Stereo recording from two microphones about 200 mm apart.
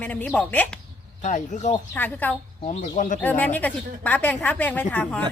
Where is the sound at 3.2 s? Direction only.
10° left (ahead or behind).